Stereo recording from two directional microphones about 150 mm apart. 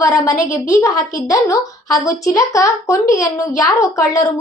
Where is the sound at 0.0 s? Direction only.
20° left (ahead or behind).